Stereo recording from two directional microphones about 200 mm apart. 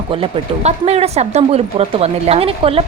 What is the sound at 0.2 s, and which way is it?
A woman's voice, 30° right (ahead or behind).